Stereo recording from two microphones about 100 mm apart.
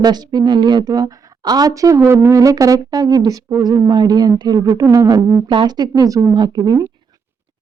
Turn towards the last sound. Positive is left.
turn(degrees=-45)  # may be behind; listen again after turning